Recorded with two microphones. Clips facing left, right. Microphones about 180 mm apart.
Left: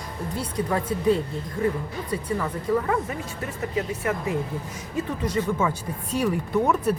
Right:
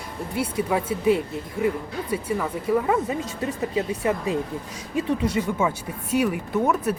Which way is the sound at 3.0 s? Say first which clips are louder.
Right 5 dB; 20° right (ahead or behind).